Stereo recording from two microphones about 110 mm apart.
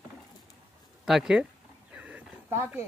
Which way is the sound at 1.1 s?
5° right (ahead or behind).